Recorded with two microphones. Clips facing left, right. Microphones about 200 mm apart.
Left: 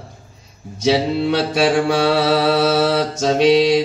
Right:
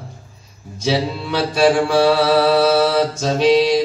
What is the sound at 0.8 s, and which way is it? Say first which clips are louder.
Mantra: left 4 dB; 60° left (ahead or behind).